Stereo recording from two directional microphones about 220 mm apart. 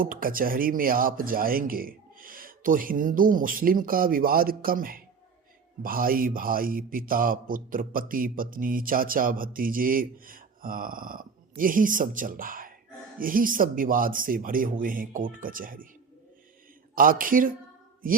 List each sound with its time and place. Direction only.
0.0 s a man's voice: 40° right (ahead or behind)
16.9 s a man's voice: 40° right (ahead or behind)